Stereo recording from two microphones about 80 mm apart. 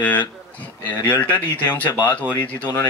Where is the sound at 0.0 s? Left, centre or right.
Left.